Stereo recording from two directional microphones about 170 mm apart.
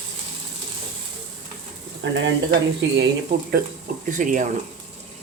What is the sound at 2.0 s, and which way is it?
Speech, 90° right.